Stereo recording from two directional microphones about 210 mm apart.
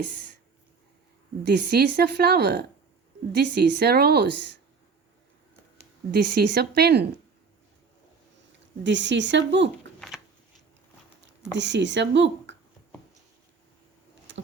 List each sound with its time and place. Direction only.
1.5 s a woman's voice: 50° right (ahead or behind)
6.3 s a woman's voice: 50° right (ahead or behind)
8.8 s speech: 60° right (ahead or behind)
11.5 s speech: 60° right (ahead or behind)
14.3 s insect: 60° right (ahead or behind)